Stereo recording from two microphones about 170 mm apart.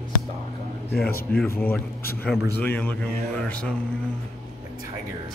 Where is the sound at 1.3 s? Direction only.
10° left (ahead or behind).